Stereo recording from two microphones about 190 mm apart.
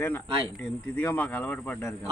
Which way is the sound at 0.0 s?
10° left (ahead or behind).